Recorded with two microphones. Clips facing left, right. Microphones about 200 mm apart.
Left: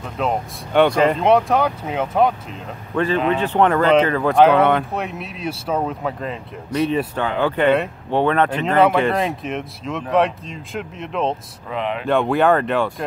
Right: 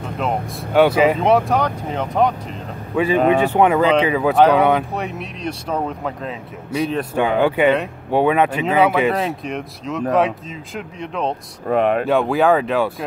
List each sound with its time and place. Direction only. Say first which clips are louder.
0.2 s speech: left 1 dB; 5° right (ahead or behind)
2.9 s speech: right 3 dB; 10° right (ahead or behind)
7.2 s speech: right 7 dB; 15° right (ahead or behind)
11.6 s speech: right 8 dB; 50° right (ahead or behind)
12.1 s speech: left 3 dB; centre (ahead or behind)